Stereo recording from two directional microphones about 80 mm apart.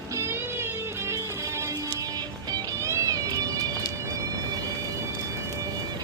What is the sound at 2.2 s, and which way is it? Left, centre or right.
Music, right.